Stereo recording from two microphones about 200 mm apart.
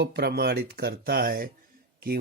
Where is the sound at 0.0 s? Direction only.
55° right (ahead or behind).